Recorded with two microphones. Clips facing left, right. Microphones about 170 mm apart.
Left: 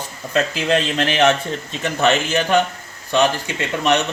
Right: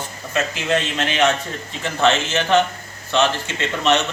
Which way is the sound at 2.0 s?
15° left (ahead or behind).